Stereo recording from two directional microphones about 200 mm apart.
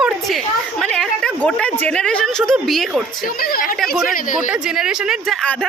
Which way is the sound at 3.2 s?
45° left (ahead or behind).